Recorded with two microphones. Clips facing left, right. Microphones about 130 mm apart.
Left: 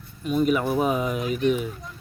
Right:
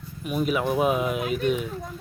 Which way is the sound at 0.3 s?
5° right (ahead or behind).